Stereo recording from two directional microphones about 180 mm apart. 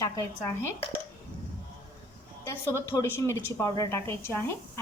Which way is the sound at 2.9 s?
15° left (ahead or behind).